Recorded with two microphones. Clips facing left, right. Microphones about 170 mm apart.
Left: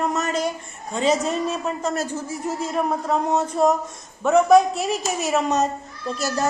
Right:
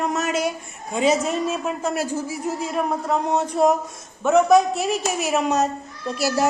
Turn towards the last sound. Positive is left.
turn(degrees=-10)  # may be behind; listen again after turning